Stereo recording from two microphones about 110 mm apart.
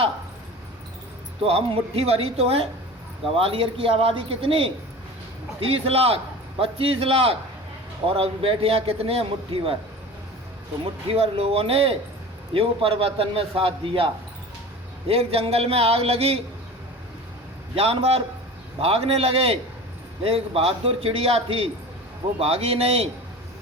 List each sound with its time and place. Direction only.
1.5 s a man's voice: 65° right (ahead or behind)
11.1 s a man's voice: 60° right (ahead or behind)
17.7 s a man's voice: 60° right (ahead or behind)